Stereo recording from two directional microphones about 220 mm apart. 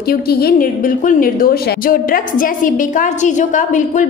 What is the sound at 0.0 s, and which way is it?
A woman's voice, 45° left (ahead or behind).